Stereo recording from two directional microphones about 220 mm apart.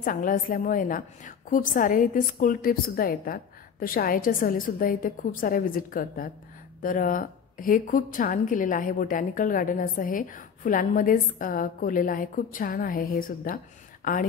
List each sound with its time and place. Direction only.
0.0 s a woman's voice: 40° left (ahead or behind)